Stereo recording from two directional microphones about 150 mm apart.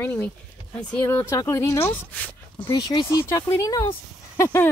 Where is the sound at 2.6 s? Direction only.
35° left (ahead or behind).